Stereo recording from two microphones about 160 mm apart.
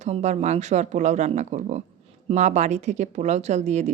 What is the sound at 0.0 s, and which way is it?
Speech, 45° right (ahead or behind).